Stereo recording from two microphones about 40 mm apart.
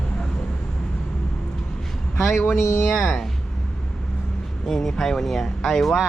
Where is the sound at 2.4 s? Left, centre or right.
Left.